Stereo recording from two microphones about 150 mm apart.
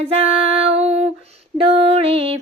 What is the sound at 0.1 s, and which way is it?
Music, 40° right (ahead or behind).